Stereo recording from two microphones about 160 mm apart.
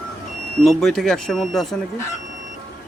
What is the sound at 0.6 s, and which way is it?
Speech, centre (ahead or behind).